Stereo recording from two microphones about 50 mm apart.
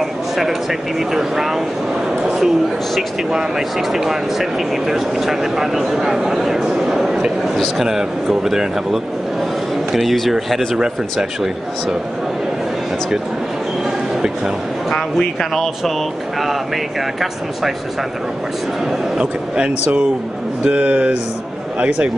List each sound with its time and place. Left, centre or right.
0.0 s speech: centre
10.8 s speech: centre
13.8 s a sound: centre
14.9 s speech: centre
19.1 s a man's voice: centre
20.6 s speech: right